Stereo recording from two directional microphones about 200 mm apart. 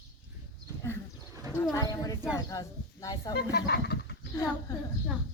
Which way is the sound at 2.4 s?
20° left (ahead or behind).